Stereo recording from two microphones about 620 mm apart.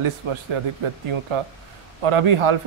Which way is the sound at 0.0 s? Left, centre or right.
Right.